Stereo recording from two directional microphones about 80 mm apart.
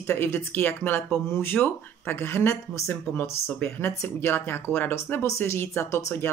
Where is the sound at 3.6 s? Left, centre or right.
Left.